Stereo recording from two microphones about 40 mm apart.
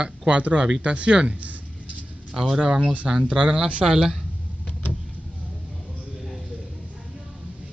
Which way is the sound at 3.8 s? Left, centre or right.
Centre.